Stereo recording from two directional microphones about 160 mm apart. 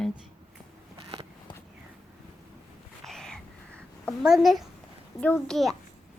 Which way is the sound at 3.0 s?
5° left (ahead or behind).